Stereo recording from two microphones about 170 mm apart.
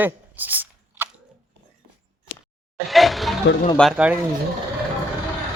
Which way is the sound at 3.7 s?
5° left (ahead or behind).